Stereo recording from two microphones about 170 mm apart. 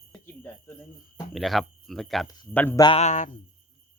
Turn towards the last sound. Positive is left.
turn(degrees=45)  # may be behind; listen again after turning